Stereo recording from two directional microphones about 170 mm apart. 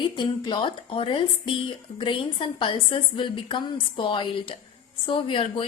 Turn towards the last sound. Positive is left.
turn(degrees=30)  # may be behind; listen again after turning